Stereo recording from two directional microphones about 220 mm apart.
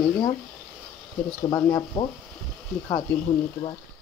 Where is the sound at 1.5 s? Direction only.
10° left (ahead or behind).